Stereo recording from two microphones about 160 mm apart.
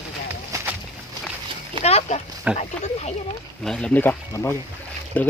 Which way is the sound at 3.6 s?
5° left (ahead or behind).